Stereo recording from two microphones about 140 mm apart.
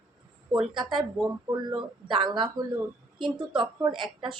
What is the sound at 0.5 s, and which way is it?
Speech, 35° right (ahead or behind).